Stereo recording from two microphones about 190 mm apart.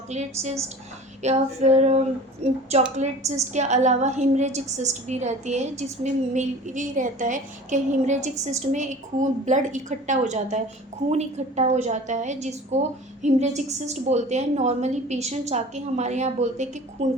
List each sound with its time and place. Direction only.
0.1 s a woman's voice: 35° right (ahead or behind)